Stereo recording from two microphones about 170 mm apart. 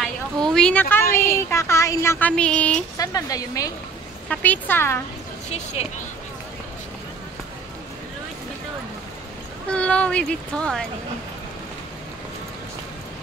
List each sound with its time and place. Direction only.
0.0 s speech: centre (ahead or behind)
3.0 s speech: 20° left (ahead or behind)
4.3 s speech: 10° left (ahead or behind)
5.5 s speech: 40° left (ahead or behind)
9.7 s speech: 5° left (ahead or behind)